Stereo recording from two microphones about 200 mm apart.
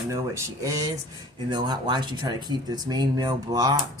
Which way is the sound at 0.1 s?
15° right (ahead or behind).